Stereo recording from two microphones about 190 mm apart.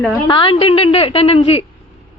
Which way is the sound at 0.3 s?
25° left (ahead or behind).